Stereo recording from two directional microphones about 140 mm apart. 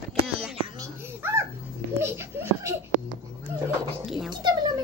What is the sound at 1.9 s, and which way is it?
Speech, 20° right (ahead or behind).